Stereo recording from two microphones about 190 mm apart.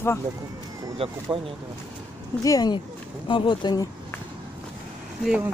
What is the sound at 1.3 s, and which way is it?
Speech, 5° right (ahead or behind).